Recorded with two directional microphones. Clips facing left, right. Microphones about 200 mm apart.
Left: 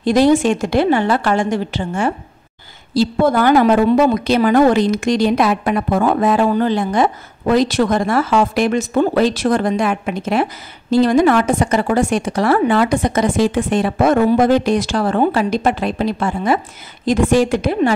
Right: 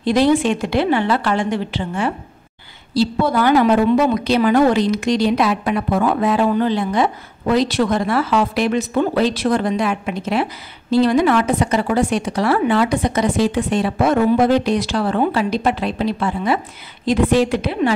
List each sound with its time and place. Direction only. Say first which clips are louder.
0.0 s a woman's voice: left 2 dB; 45° left (ahead or behind)